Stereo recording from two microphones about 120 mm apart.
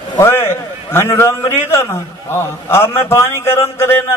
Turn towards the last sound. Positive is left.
turn(degrees=20)  # may be behind; listen again after turning